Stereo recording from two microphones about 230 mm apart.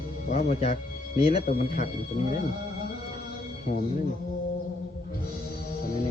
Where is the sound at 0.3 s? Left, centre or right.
Left.